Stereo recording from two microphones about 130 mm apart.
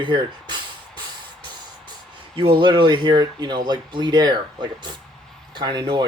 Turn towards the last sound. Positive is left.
turn(degrees=-35)  # may be behind; listen again after turning